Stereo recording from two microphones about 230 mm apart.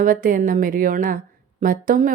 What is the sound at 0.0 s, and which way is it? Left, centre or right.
Speech, right.